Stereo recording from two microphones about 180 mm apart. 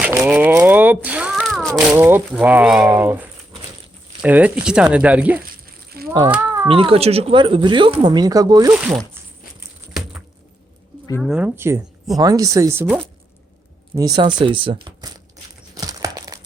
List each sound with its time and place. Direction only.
0.2 s a sound: 5° right (ahead or behind)
1.9 s speech: 10° right (ahead or behind)
6.1 s a child's voice: 20° right (ahead or behind)
6.3 s cat: 15° right (ahead or behind)
6.7 s speech: 30° right (ahead or behind)
11.2 s speech: 5° right (ahead or behind); by 15.1 s 25° right (ahead or behind)
15.7 s crumpling: 20° right (ahead or behind)